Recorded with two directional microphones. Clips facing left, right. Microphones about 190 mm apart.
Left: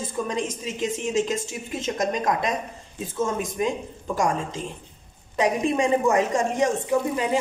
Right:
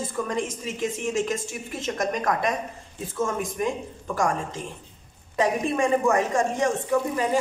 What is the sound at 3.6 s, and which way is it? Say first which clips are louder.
Speech: left 2 dB; 20° left (ahead or behind).